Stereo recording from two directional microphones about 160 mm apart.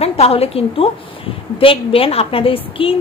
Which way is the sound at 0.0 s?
40° left (ahead or behind).